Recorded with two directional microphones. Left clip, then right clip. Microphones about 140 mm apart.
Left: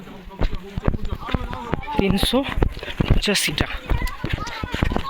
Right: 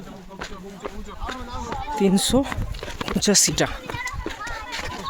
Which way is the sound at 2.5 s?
5° right (ahead or behind).